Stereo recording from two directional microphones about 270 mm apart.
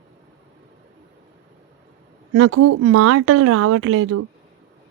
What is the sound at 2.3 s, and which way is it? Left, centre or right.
Speech, right.